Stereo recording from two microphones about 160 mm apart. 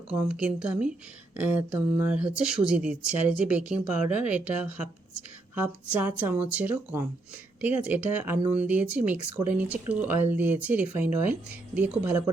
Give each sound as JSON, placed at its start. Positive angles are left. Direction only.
{"t": 0.2, "sound": "speech", "side_deg": -5}